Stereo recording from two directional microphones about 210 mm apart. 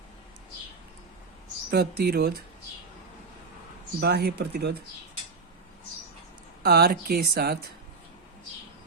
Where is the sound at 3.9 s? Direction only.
50° right (ahead or behind).